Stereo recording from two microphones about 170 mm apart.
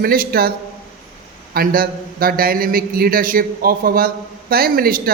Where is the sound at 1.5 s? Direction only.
60° right (ahead or behind).